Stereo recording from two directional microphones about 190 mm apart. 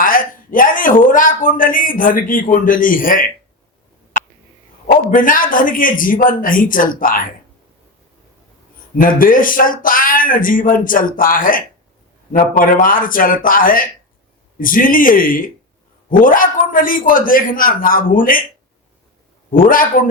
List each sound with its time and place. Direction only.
0.0 s a sound: 45° left (ahead or behind)
4.9 s speech: 45° left (ahead or behind)
9.0 s speech: 45° left (ahead or behind)
19.5 s speech: 45° left (ahead or behind)